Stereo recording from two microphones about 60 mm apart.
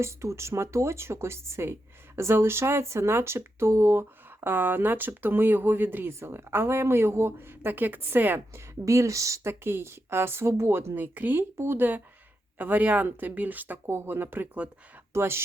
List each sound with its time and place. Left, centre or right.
0.0 s speech: right
4.4 s speech: right
8.5 s speech: right
9.5 s speech: right
11.5 s speech: right
11.8 s speech: right
13.8 s speech: right